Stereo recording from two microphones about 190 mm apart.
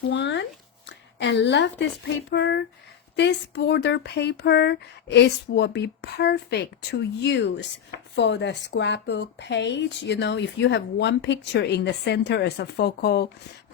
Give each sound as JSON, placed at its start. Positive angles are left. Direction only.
{"t": 0.1, "sound": "a woman's voice", "side_deg": 70}